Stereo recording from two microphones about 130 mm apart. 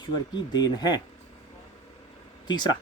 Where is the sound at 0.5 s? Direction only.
30° left (ahead or behind).